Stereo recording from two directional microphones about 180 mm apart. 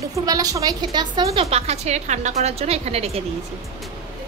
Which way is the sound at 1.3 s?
35° right (ahead or behind).